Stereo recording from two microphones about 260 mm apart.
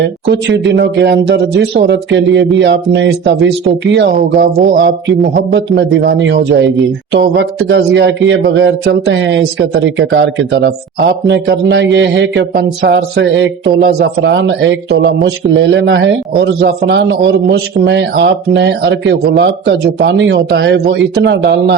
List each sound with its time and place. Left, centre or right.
0.0 s a man's voice: right